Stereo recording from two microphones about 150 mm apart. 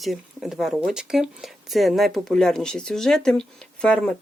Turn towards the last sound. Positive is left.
turn(degrees=5)  # may be behind; listen again after turning